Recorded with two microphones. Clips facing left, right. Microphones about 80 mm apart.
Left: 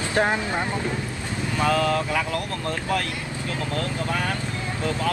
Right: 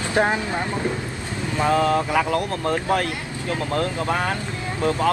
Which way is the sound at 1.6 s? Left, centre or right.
Right.